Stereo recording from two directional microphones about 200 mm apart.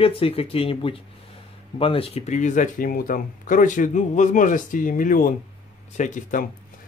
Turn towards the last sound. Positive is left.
turn(degrees=40)  # may be behind; listen again after turning